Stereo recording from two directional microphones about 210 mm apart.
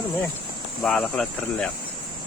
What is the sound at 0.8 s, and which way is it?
Speech, 5° left (ahead or behind).